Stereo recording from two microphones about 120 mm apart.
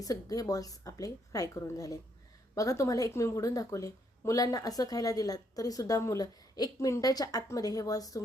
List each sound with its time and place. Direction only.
0.0 s a woman's voice: 30° left (ahead or behind)